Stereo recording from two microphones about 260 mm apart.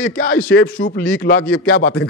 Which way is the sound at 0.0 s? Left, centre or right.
Left.